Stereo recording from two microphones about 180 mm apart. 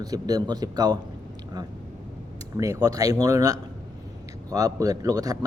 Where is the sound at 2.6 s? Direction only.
20° right (ahead or behind).